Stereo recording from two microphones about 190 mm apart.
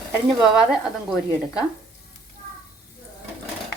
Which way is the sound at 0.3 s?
5° right (ahead or behind).